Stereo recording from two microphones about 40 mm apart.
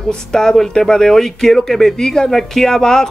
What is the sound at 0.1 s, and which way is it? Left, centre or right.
Speech, centre.